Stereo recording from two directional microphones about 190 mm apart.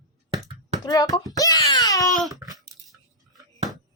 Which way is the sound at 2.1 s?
Centre (ahead or behind).